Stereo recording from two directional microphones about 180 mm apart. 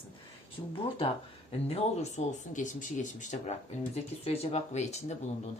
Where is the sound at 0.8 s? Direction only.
30° left (ahead or behind).